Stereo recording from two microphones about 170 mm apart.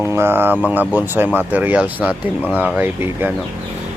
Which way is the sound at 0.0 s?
15° right (ahead or behind).